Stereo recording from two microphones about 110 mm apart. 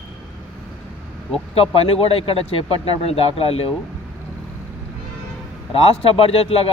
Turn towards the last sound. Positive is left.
turn(degrees=65)  # may be behind; listen again after turning